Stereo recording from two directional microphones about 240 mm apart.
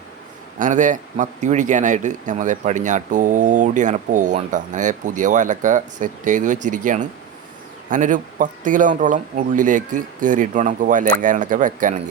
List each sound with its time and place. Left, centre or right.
0.6 s speech: right